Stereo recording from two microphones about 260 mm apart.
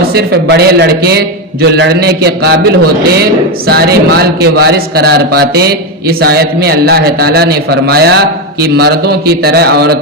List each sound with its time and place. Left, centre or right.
0.1 s a man's voice: right